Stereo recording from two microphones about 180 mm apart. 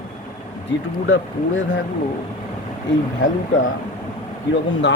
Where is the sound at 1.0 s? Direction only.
90° left.